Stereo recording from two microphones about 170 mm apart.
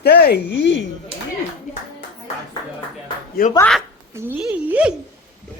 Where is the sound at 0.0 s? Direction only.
70° left (ahead or behind); by 0.9 s 90° left.